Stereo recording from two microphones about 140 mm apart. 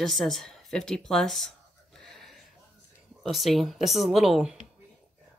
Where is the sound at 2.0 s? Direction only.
Centre (ahead or behind).